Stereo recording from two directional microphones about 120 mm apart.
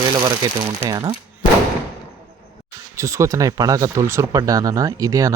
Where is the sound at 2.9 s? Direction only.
25° right (ahead or behind).